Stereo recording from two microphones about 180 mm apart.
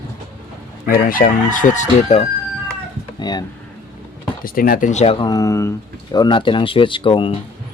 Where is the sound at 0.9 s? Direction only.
55° left (ahead or behind).